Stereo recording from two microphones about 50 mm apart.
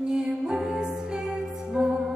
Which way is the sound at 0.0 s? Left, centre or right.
Centre.